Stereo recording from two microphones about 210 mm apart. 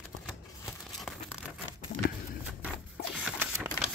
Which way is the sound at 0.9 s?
Centre (ahead or behind).